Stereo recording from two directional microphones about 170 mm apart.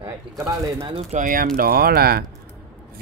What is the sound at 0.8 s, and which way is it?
Speech, 35° right (ahead or behind).